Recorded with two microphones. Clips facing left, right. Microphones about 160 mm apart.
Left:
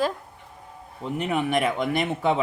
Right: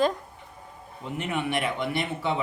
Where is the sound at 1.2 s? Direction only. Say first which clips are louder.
Left 4 dB; 40° left (ahead or behind).